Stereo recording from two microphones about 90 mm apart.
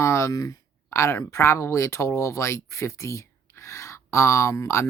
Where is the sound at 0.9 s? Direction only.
35° left (ahead or behind).